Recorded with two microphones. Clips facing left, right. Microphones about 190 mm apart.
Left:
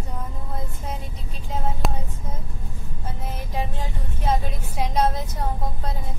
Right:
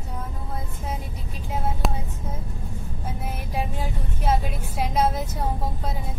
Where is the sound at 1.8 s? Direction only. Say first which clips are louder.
Even; centre (ahead or behind).